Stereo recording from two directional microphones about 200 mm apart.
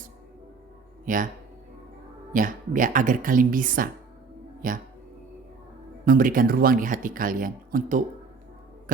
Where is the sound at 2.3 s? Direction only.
40° right (ahead or behind).